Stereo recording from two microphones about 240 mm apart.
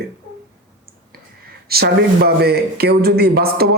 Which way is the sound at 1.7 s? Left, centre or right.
Right.